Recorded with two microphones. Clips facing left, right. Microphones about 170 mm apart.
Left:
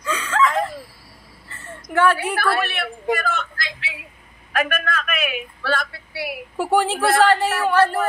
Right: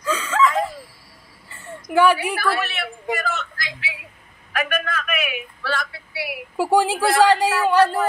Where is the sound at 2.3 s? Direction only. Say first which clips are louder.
Left 2 dB; 55° left (ahead or behind).